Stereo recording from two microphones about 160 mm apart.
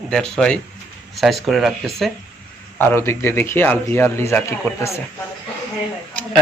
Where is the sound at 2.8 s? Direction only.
15° left (ahead or behind).